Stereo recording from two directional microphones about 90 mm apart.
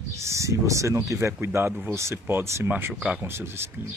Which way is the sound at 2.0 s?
30° right (ahead or behind).